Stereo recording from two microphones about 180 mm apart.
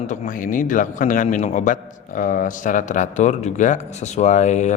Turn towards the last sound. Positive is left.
turn(degrees=40)  # may be behind; listen again after turning